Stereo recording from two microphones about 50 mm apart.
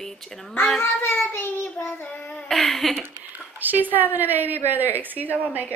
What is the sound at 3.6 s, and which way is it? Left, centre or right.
A woman's voice, right.